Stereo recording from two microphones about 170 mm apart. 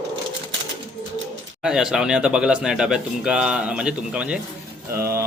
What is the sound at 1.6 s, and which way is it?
Speech, 5° right (ahead or behind).